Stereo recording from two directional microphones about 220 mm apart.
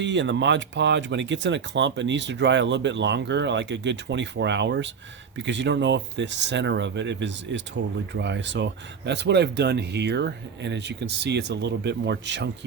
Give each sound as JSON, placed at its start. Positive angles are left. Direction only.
{"t": 0.0, "sound": "speech", "side_deg": -55}